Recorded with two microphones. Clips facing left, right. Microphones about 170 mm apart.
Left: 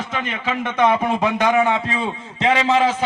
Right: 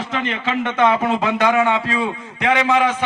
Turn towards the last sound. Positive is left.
turn(degrees=30)  # may be behind; listen again after turning